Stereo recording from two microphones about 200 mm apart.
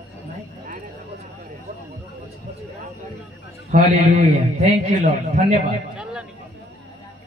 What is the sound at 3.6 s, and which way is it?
A man's voice, 35° right (ahead or behind).